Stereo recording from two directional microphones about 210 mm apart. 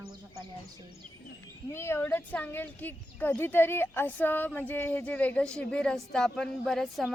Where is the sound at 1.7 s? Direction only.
10° left (ahead or behind).